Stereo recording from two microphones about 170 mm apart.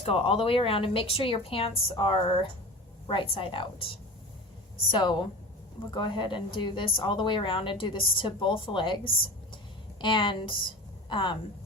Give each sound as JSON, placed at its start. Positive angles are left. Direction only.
{"t": 0.0, "sound": "a woman's voice", "side_deg": 35}